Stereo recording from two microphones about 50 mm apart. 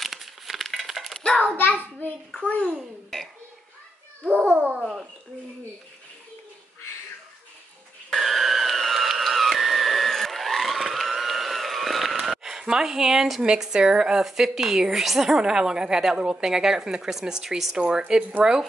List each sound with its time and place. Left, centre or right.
0.0 s a sound: centre
1.2 s hands: left
2.3 s a child's voice: left
2.6 s a child's voice: centre
4.6 s babbling: right
8.1 s a sound: centre
14.2 s a woman's voice: centre
17.7 s a woman's voice: centre